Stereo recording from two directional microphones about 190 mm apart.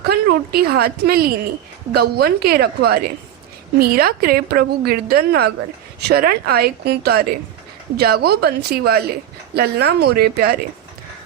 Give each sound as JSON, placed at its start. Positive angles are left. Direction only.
{"t": 0.0, "sound": "a woman's voice", "side_deg": -55}